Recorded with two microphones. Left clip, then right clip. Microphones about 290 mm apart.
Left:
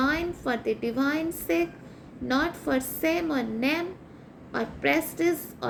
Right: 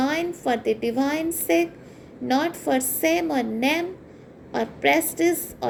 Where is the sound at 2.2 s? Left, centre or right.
Centre.